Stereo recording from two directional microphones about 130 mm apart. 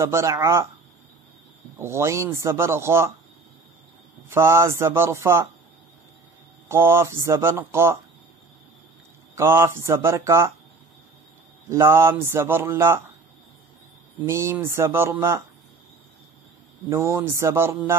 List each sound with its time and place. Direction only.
0.0 s speech: 20° right (ahead or behind)
1.8 s speech: 20° right (ahead or behind)
4.3 s speech: 20° right (ahead or behind)
6.7 s speech: 20° right (ahead or behind)
9.3 s speech: 20° right (ahead or behind)
11.7 s speech: 20° right (ahead or behind)
14.2 s speech: 20° right (ahead or behind)
16.9 s speech: 20° right (ahead or behind)